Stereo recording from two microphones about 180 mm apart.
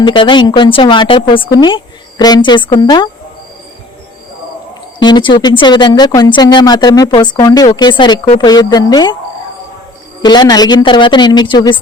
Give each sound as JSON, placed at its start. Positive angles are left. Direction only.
{"t": 0.0, "sound": "speech", "side_deg": 25}
{"t": 4.9, "sound": "speech", "side_deg": 25}
{"t": 10.2, "sound": "speech", "side_deg": 20}